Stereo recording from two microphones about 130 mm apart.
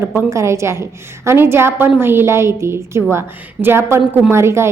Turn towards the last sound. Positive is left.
turn(degrees=-20)  # may be behind; listen again after turning